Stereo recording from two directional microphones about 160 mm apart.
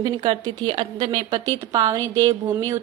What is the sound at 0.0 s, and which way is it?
A woman's voice, 25° right (ahead or behind).